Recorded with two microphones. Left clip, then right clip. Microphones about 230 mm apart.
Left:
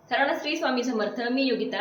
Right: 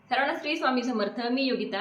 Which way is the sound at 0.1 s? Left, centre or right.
Centre.